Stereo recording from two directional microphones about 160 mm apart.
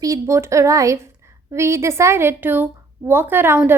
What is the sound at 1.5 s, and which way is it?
A woman's voice, 15° right (ahead or behind).